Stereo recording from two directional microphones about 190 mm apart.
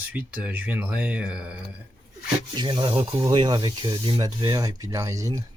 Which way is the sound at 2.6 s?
25° right (ahead or behind).